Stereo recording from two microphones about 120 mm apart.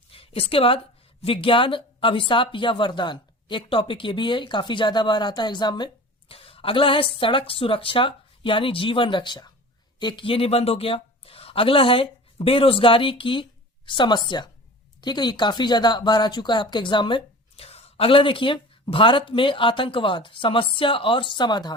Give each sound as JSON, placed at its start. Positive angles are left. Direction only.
{"t": 0.1, "sound": "a woman's voice", "side_deg": 50}
{"t": 6.3, "sound": "a man's voice", "side_deg": 50}
{"t": 17.7, "sound": "speech", "side_deg": 60}